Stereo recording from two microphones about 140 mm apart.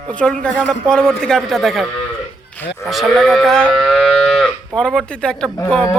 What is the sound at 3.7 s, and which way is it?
Moo, centre (ahead or behind).